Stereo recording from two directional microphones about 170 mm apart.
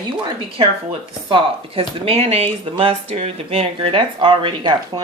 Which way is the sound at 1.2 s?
30° right (ahead or behind).